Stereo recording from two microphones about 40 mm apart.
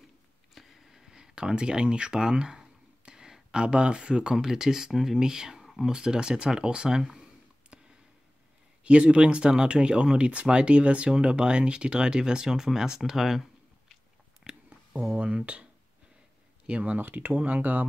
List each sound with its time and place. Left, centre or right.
0.6 s a sound: centre
4.5 s speech: centre
7.7 s a sound: right
8.8 s speech: right; by 13.4 s centre
14.4 s a sound: right
15.1 s speech: right
16.6 s speech: right
17.0 s speech: right
17.4 s speech: right